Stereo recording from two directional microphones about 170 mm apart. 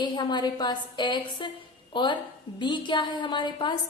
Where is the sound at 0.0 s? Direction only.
25° left (ahead or behind).